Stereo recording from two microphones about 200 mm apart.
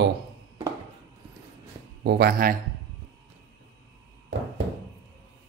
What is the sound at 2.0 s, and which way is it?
Speech, 55° right (ahead or behind).